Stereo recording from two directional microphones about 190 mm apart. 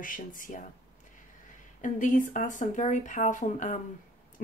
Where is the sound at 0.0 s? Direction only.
45° left (ahead or behind).